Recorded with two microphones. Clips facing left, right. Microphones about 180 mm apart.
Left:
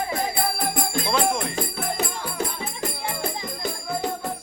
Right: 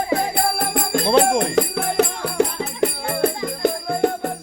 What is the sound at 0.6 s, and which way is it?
Music, 70° right (ahead or behind).